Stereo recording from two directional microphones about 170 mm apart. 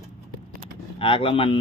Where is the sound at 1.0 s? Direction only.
30° left (ahead or behind).